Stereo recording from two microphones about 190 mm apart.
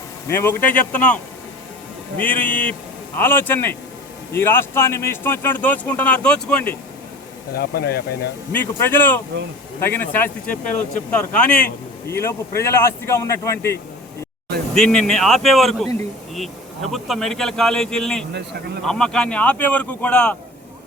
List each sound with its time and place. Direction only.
0.3 s a man's voice: 10° left (ahead or behind)
7.5 s speech: 55° left (ahead or behind)
8.5 s a man's voice: 10° left (ahead or behind)
14.8 s a man's voice: 5° left (ahead or behind)